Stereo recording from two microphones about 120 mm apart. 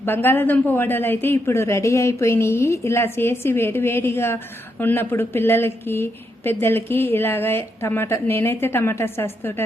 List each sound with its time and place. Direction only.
0.0 s speech: 15° left (ahead or behind)